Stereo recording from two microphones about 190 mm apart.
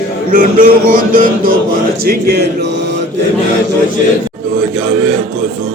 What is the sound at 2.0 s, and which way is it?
Music, 55° right (ahead or behind).